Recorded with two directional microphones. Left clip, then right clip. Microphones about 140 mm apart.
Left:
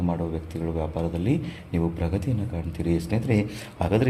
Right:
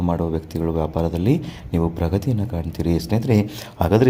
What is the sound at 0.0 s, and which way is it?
Speech, 35° right (ahead or behind).